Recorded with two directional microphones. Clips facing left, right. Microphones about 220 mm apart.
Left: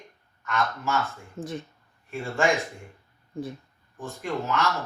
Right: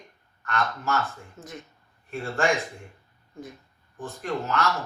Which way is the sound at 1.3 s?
30° left (ahead or behind).